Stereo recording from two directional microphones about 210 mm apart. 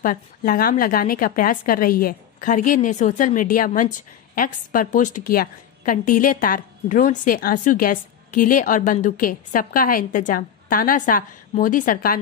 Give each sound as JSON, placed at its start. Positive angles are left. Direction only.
{"t": 0.0, "sound": "a woman's voice", "side_deg": 40}